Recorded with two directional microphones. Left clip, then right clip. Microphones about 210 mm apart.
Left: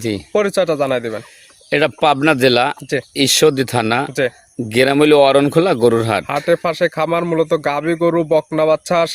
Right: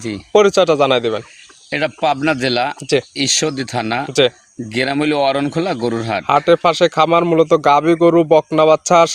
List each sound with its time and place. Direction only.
0.3 s speech: 30° right (ahead or behind)
1.7 s a man's voice: 55° left (ahead or behind)
6.2 s speech: 30° right (ahead or behind)